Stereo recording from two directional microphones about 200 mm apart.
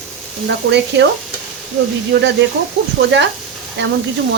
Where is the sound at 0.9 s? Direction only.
60° right (ahead or behind).